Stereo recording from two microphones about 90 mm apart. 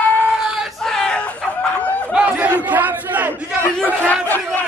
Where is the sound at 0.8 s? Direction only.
5° left (ahead or behind).